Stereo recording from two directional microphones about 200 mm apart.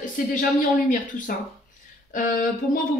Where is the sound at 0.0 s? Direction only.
40° left (ahead or behind).